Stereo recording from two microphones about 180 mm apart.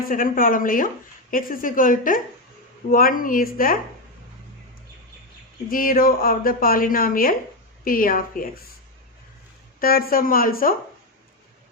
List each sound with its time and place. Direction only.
0.0 s a woman's voice: 50° left (ahead or behind)
5.6 s a woman's voice: 50° left (ahead or behind)
9.8 s a woman's voice: 55° left (ahead or behind)